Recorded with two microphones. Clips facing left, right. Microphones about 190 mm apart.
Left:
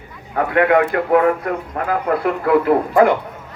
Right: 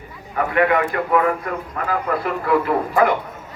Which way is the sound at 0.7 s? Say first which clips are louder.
Left 4 dB; 55° left (ahead or behind).